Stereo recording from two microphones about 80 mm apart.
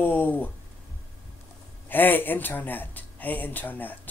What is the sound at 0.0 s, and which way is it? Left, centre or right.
Speech, left.